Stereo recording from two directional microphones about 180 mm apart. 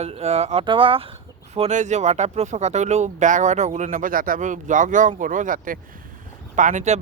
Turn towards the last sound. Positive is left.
turn(degrees=-40)  # may be behind; listen again after turning